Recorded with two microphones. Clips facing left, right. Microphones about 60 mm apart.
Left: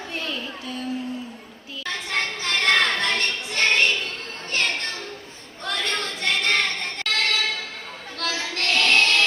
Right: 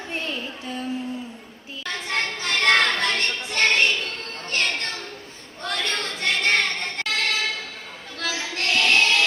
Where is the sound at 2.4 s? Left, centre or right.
Right.